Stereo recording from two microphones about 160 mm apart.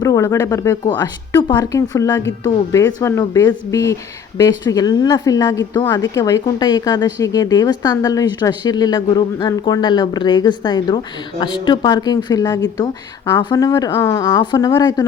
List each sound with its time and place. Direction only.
0.0 s a woman's voice: 20° left (ahead or behind)